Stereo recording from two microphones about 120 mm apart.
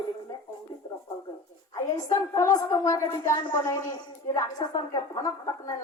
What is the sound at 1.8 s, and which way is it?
A man's voice, 30° left (ahead or behind).